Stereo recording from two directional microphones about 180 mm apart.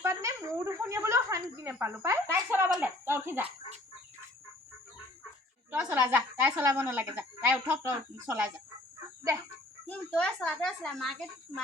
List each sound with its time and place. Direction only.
0.0 s a sound: 15° right (ahead or behind)
2.7 s speech: 10° right (ahead or behind)
5.7 s a woman's voice: 10° right (ahead or behind)
9.8 s speech: 5° left (ahead or behind)